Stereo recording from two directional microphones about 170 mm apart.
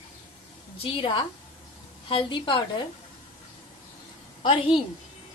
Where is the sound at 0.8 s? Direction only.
30° left (ahead or behind).